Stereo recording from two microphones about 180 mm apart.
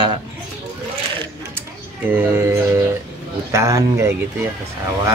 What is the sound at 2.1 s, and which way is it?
Speech, 10° right (ahead or behind).